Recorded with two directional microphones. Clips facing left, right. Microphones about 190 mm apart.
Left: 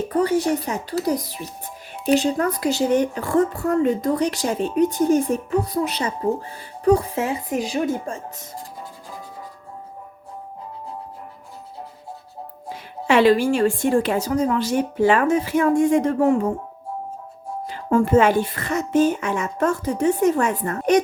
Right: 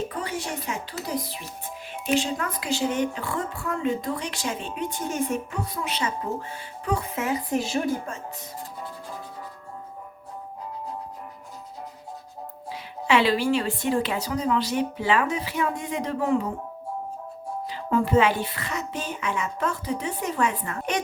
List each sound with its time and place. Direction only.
0.1 s a woman's voice: 40° left (ahead or behind)
7.6 s speech: 15° left (ahead or behind)
12.6 s speech: 45° left (ahead or behind)
17.7 s speech: 50° left (ahead or behind)